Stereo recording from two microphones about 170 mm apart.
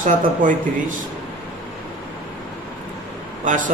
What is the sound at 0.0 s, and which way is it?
Speech, 50° right (ahead or behind).